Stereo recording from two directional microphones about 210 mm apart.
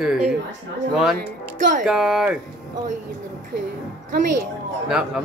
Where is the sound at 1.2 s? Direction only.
40° right (ahead or behind).